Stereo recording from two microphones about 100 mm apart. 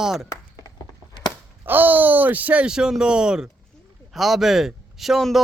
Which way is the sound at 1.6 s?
20° right (ahead or behind).